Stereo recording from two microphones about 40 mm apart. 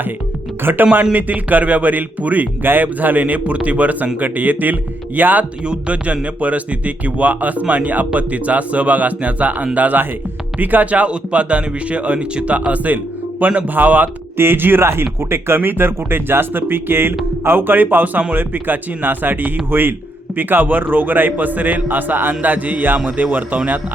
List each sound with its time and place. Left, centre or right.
0.6 s a man's voice: right
1.1 s a man's voice: right
5.6 s speech: right
6.2 s a man's voice: right
14.3 s a man's voice: right
22.4 s a man's voice: right